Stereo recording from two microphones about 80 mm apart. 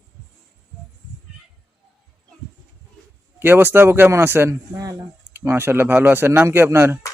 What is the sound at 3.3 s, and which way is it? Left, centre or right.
A man's voice, right.